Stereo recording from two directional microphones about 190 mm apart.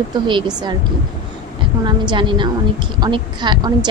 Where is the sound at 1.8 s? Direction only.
25° right (ahead or behind).